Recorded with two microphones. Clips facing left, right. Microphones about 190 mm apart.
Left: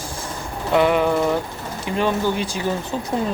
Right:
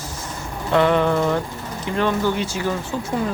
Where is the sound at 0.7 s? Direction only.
10° left (ahead or behind).